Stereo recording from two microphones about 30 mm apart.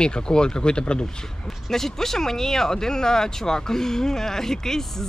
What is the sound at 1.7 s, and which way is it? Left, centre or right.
Speech, centre.